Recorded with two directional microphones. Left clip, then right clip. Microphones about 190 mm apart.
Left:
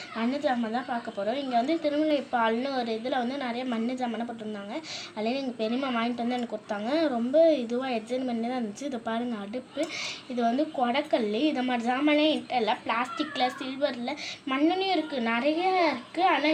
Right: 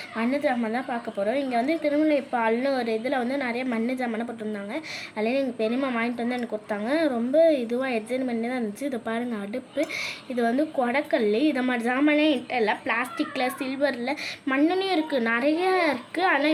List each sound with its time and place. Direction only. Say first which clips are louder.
0.2 s speech: right 3 dB; 15° right (ahead or behind)
5.2 s a woman's voice: right 5 dB; 10° right (ahead or behind); by 16.5 s 30° right (ahead or behind)